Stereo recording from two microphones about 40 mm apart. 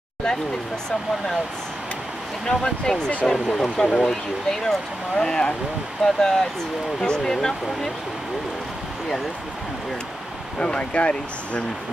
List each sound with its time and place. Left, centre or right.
2.4 s speech: centre
3.2 s speech: centre
3.8 s speech: left
4.1 s speech: centre
10.6 s speech: left